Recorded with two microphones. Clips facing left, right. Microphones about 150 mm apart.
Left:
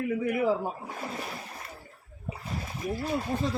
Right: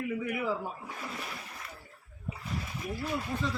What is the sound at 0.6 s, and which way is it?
Speech, 35° left (ahead or behind).